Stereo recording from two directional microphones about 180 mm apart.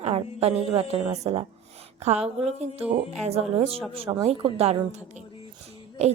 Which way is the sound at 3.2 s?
35° right (ahead or behind).